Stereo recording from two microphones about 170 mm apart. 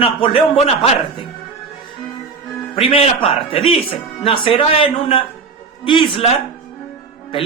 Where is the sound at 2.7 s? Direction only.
35° left (ahead or behind).